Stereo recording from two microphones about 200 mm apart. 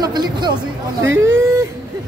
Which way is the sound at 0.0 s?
20° right (ahead or behind).